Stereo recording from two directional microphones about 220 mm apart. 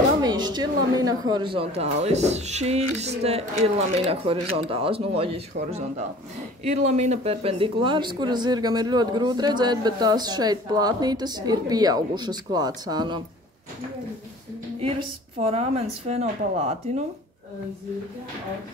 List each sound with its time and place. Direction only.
0.2 s speech: 20° right (ahead or behind)
14.8 s speech: 25° right (ahead or behind)